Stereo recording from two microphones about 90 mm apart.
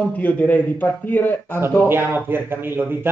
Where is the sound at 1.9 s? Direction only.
25° right (ahead or behind).